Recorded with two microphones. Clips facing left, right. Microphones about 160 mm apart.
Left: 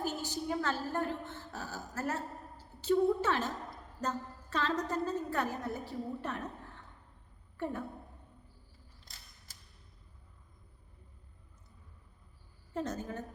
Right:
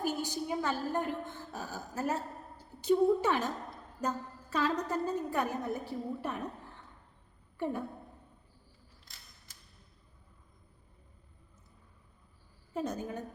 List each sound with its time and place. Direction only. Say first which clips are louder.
0.0 s a woman's voice: right 2 dB; 15° right (ahead or behind)
7.5 s speech: right 3 dB; 15° right (ahead or behind)
12.7 s a woman's voice: right 1 dB; 10° right (ahead or behind)